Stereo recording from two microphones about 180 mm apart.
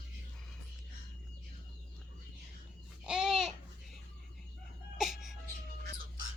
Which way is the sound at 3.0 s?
5° right (ahead or behind).